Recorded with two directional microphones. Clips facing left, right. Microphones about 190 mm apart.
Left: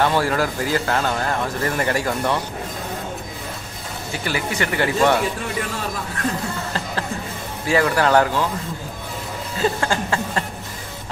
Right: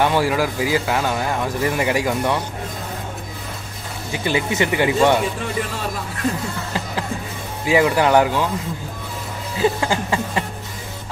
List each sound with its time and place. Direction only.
0.0 s speech: 15° right (ahead or behind)
4.1 s speech: 20° right (ahead or behind)
7.6 s speech: 15° right (ahead or behind)
9.6 s speech: 15° right (ahead or behind)